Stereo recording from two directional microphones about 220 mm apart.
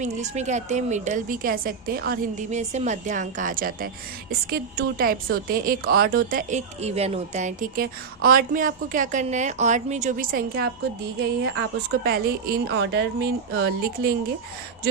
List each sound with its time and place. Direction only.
0.0 s a woman's voice: 30° right (ahead or behind)